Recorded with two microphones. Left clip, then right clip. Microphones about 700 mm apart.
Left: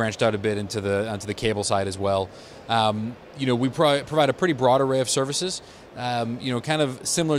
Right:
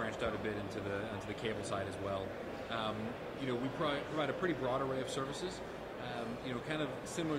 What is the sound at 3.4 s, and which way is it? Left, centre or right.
Speech, left.